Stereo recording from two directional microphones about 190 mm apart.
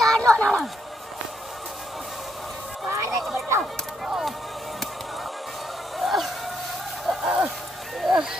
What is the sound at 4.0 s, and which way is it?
Speech, centre (ahead or behind).